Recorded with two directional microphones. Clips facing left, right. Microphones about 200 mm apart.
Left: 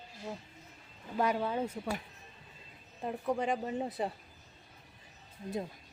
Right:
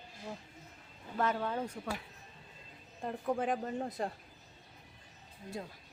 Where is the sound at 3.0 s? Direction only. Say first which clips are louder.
Left 1 dB; centre (ahead or behind).